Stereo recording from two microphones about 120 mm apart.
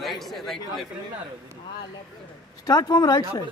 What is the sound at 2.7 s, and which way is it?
Speech, 35° left (ahead or behind).